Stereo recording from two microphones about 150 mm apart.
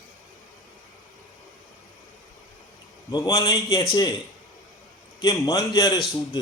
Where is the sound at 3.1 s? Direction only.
25° left (ahead or behind).